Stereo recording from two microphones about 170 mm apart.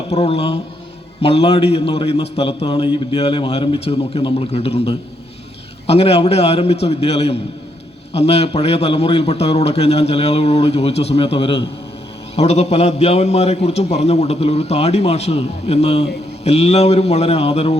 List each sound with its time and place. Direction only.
0.1 s a man's voice: 35° left (ahead or behind)